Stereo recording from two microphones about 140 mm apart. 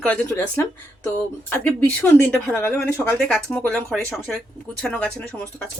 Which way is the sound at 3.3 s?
5° left (ahead or behind).